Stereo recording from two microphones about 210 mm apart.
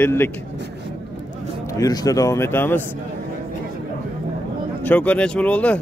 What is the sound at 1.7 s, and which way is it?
Speech, 20° left (ahead or behind).